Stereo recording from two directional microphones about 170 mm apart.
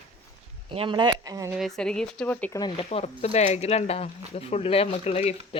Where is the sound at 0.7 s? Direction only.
30° right (ahead or behind).